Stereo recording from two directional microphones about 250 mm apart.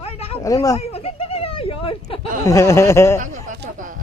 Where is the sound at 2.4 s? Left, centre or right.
Centre.